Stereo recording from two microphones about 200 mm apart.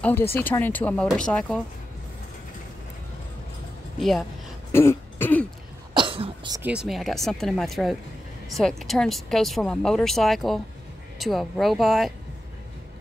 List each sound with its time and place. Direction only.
0.0 s speech: 10° left (ahead or behind)
4.7 s throat clearing: 10° left (ahead or behind)
5.9 s cough: 25° right (ahead or behind)
6.6 s speech: 5° right (ahead or behind)